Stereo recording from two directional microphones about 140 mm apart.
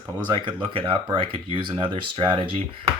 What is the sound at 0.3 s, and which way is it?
Speech, 35° right (ahead or behind).